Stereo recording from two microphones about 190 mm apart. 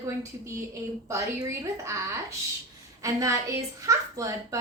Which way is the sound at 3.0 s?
15° right (ahead or behind).